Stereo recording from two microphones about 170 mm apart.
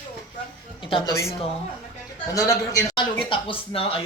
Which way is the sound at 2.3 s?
20° left (ahead or behind).